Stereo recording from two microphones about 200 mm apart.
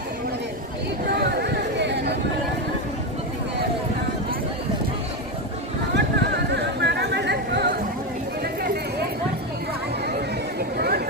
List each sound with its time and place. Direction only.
1.1 s chatter: 55° right (ahead or behind)
5.9 s chatter: 60° right (ahead or behind)
8.6 s a sound: 50° right (ahead or behind)
10.8 s chatter: 50° right (ahead or behind)